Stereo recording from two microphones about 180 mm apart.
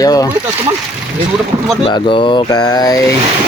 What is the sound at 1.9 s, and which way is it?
Speech, 30° left (ahead or behind).